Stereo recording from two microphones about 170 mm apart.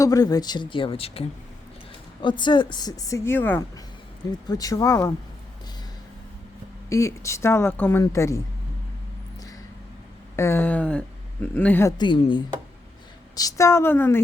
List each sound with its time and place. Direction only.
0.0 s speech: 20° left (ahead or behind)
2.2 s speech: 30° left (ahead or behind); by 3.6 s 10° left (ahead or behind)
4.3 s speech: 20° left (ahead or behind)
6.9 s speech: 15° left (ahead or behind)
10.3 s speech: 15° left (ahead or behind)
11.9 s speech: 30° left (ahead or behind); by 14.2 s 10° left (ahead or behind)